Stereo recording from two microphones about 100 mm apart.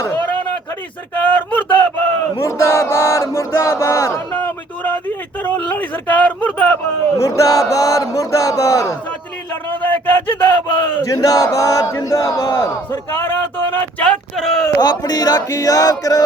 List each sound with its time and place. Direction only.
1.1 s speech: 20° left (ahead or behind)
2.4 s chant: 30° left (ahead or behind)
4.8 s speech: 20° left (ahead or behind)
7.2 s speech: 35° left (ahead or behind)
9.6 s a sound: 20° left (ahead or behind)
10.4 s chant: 20° left (ahead or behind)
11.1 s speech: 35° left (ahead or behind); by 13.8 s 20° left (ahead or behind)
14.0 s a sound: 5° left (ahead or behind)
14.8 s speech: 45° left (ahead or behind)